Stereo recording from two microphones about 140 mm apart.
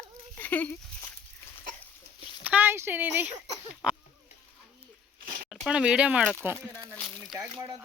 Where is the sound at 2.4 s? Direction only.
10° right (ahead or behind).